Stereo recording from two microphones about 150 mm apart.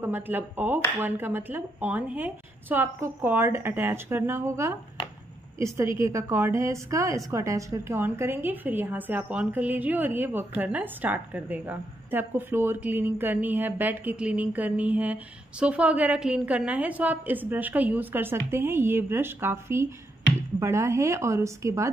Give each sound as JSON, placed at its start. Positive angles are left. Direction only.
{"t": 0.0, "sound": "a woman's voice", "side_deg": -15}